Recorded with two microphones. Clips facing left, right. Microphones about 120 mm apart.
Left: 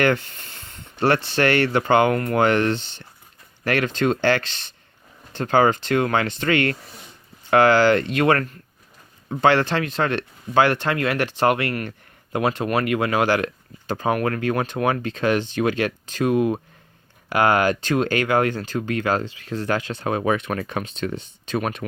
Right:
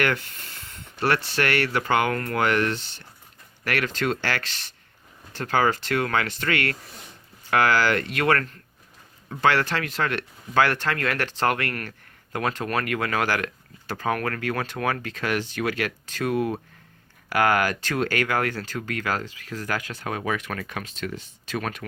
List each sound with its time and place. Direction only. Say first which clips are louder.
0.0 s speech: left 5 dB; 25° left (ahead or behind)